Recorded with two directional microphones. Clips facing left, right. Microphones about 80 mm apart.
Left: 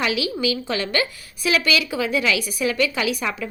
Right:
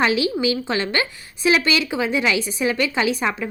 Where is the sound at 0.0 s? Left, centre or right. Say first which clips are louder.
Right 4 dB; right.